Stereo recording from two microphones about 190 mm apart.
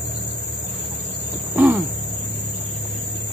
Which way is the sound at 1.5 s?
10° right (ahead or behind).